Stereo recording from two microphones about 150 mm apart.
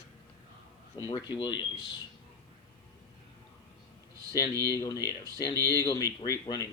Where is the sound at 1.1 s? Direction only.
30° left (ahead or behind).